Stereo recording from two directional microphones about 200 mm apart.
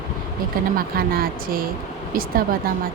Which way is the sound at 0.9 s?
50° right (ahead or behind).